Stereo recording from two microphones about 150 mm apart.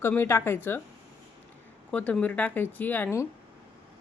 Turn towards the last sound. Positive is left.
turn(degrees=15)  # may be behind; listen again after turning